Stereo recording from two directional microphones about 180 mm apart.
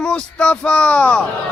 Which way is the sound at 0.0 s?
5° left (ahead or behind).